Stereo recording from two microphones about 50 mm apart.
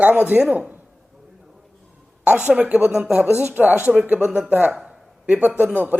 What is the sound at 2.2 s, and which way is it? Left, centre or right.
A woman's voice, right.